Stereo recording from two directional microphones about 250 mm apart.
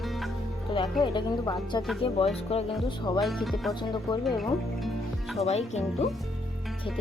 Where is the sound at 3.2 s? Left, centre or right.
Centre.